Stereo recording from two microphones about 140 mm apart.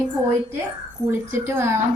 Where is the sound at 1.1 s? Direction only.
20° right (ahead or behind).